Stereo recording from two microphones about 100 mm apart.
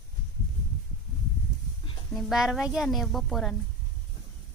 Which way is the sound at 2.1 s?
5° right (ahead or behind).